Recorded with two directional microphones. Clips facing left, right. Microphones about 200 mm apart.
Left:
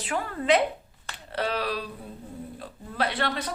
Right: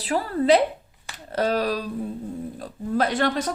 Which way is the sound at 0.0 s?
35° right (ahead or behind).